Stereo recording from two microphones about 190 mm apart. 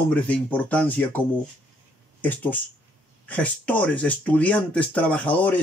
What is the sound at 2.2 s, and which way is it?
Speech, 10° left (ahead or behind).